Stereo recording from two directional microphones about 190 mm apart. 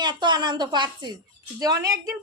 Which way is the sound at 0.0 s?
25° right (ahead or behind).